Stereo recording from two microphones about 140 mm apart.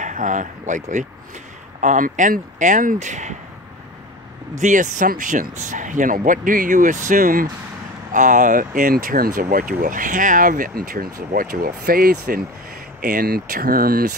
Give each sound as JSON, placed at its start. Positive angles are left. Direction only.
{"t": 0.0, "sound": "a man's voice", "side_deg": -65}
{"t": 4.6, "sound": "speech", "side_deg": -65}
{"t": 8.1, "sound": "speech", "side_deg": -65}